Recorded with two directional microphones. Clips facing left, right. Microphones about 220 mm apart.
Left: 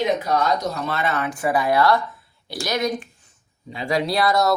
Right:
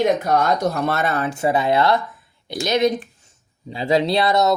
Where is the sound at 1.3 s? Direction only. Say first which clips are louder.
Right 2 dB; 25° right (ahead or behind).